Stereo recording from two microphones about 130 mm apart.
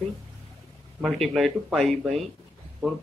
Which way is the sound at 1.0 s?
Centre (ahead or behind).